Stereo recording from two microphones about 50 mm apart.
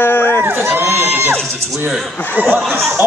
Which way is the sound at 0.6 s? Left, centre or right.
Right.